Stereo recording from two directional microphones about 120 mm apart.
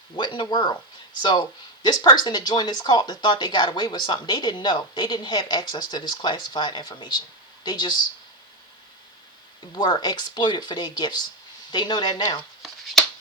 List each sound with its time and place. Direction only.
0.2 s speech: 40° left (ahead or behind)
9.7 s speech: 35° left (ahead or behind)
12.6 s shuffling cards: centre (ahead or behind)